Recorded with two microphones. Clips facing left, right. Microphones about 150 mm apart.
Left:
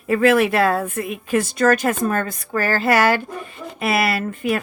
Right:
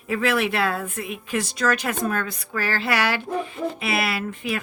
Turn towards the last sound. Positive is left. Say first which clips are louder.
# left 5 dB
turn(degrees=50)  # may be behind; listen again after turning